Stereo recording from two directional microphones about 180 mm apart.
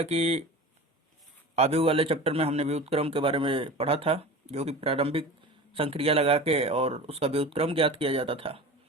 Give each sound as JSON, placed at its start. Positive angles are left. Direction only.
{"t": 0.0, "sound": "a man's voice", "side_deg": -35}
{"t": 1.5, "sound": "a man's voice", "side_deg": -35}